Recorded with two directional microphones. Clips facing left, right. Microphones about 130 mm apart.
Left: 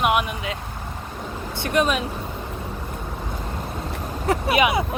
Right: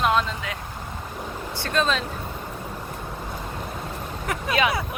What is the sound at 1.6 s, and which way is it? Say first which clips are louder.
Speech: left 3 dB; 15° left (ahead or behind).